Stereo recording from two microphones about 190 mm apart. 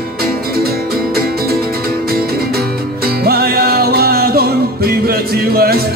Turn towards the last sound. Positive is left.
turn(degrees=-55)  # may be behind; listen again after turning